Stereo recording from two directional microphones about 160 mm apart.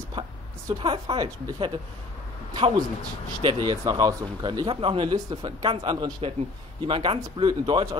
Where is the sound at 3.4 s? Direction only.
30° right (ahead or behind).